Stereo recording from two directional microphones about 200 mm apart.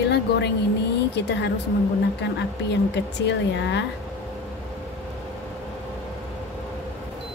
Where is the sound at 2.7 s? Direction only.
60° left (ahead or behind).